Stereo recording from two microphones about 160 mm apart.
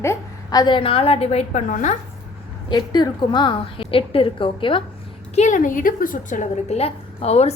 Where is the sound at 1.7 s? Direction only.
50° left (ahead or behind).